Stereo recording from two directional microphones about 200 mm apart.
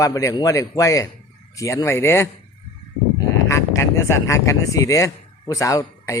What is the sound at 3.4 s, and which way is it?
Speech, 15° left (ahead or behind).